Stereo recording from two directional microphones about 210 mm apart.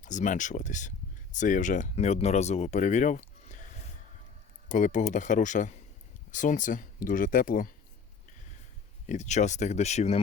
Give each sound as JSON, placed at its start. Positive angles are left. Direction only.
{"t": 0.0, "sound": "speech", "side_deg": 35}
{"t": 4.7, "sound": "speech", "side_deg": 35}
{"t": 9.0, "sound": "speech", "side_deg": 35}